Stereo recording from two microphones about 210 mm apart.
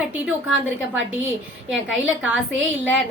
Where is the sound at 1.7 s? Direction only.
5° right (ahead or behind).